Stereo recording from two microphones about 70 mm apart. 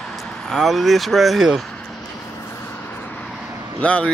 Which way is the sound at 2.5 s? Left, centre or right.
Left.